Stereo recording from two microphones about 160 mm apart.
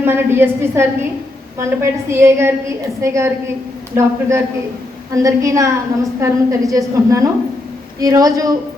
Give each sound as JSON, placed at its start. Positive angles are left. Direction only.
{"t": 0.0, "sound": "a woman's voice", "side_deg": -15}